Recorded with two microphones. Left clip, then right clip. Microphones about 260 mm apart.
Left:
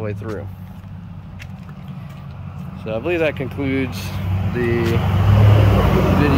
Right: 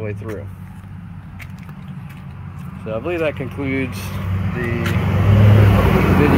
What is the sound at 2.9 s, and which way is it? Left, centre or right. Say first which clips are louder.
Speech: left 1 dB; centre.